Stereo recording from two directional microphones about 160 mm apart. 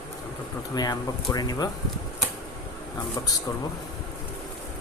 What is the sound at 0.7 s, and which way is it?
Speech, 25° left (ahead or behind).